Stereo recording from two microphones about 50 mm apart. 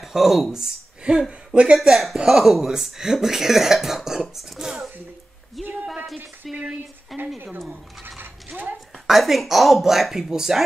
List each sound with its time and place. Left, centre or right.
0.0 s speech: centre
1.8 s speech: centre
5.6 s a sound: centre
6.4 s a woman's voice: centre
8.2 s a sound: right
9.0 s speech: centre